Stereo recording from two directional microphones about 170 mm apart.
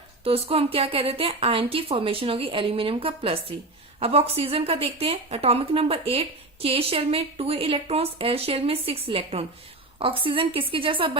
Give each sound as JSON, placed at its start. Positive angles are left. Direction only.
{"t": 0.3, "sound": "a woman's voice", "side_deg": -35}